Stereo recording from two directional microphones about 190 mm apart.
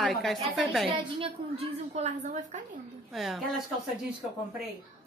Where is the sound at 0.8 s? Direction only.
30° right (ahead or behind).